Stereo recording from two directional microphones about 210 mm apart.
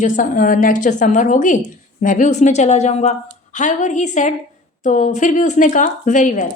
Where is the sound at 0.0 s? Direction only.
40° left (ahead or behind).